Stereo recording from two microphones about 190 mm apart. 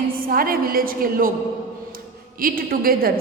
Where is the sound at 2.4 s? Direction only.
50° right (ahead or behind).